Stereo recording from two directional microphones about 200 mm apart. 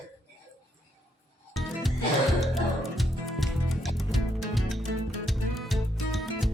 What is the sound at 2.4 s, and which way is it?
Music, centre (ahead or behind).